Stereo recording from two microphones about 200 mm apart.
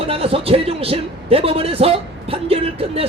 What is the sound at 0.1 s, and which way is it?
A man's voice, 30° right (ahead or behind).